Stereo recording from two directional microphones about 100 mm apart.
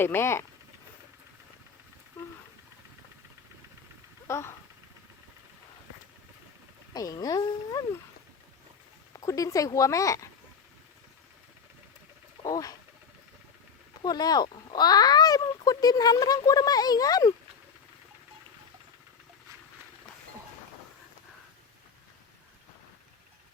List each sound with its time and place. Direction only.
0.0 s speech: 25° left (ahead or behind)
4.3 s speech: 25° left (ahead or behind)
6.9 s speech: 35° left (ahead or behind)
9.1 s speech: 35° left (ahead or behind)
12.4 s speech: 35° left (ahead or behind)
14.0 s speech: 40° left (ahead or behind)